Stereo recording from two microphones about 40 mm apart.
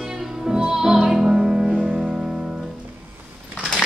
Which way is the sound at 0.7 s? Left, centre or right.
Centre.